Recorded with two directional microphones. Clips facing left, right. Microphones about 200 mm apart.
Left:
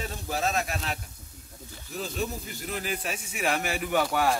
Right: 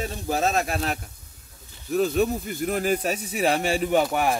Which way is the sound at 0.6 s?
45° right (ahead or behind).